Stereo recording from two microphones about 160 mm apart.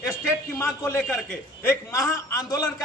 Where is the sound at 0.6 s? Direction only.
15° left (ahead or behind).